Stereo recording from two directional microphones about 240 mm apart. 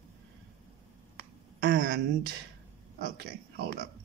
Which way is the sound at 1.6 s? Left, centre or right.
Right.